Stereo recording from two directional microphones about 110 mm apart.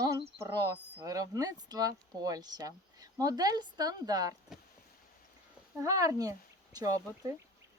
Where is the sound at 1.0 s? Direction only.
30° right (ahead or behind).